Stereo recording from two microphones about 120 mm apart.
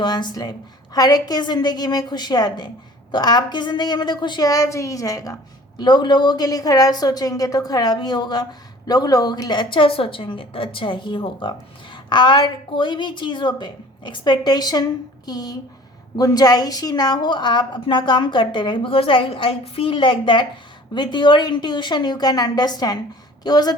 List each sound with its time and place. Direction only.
0.0 s a woman's voice: 35° left (ahead or behind)